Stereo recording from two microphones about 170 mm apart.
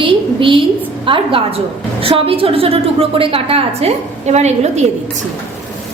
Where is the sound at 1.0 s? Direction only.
30° right (ahead or behind).